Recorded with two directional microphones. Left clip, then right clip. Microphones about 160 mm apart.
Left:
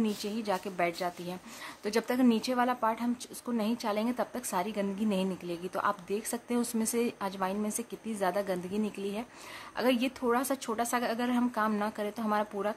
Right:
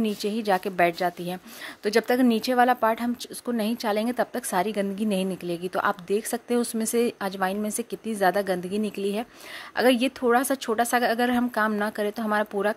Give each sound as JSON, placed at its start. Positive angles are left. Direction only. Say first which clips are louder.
{"t": 0.0, "sound": "a woman's voice", "louder": "right 7 dB", "side_deg": -30}